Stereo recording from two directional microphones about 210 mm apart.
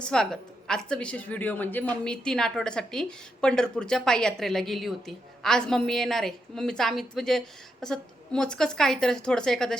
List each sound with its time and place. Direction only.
0.0 s speech: 5° left (ahead or behind)